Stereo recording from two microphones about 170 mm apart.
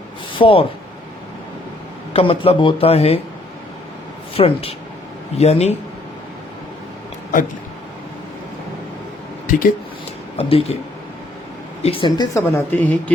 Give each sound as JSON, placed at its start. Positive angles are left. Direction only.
{"t": 0.3, "sound": "speech", "side_deg": 30}
{"t": 2.1, "sound": "speech", "side_deg": 35}
{"t": 4.4, "sound": "speech", "side_deg": 35}
{"t": 9.5, "sound": "speech", "side_deg": 55}
{"t": 10.3, "sound": "speech", "side_deg": 35}
{"t": 11.8, "sound": "speech", "side_deg": 30}
{"t": 12.4, "sound": "speech", "side_deg": 15}